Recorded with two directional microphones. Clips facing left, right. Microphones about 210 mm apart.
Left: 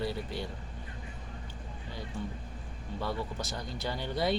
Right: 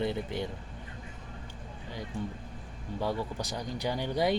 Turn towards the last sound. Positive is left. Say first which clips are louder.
# right 3 dB
turn(degrees=-15)  # may be behind; listen again after turning